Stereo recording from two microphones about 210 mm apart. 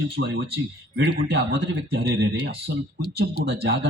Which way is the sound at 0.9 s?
50° right (ahead or behind).